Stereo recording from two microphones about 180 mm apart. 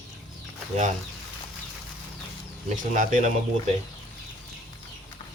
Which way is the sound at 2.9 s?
45° right (ahead or behind).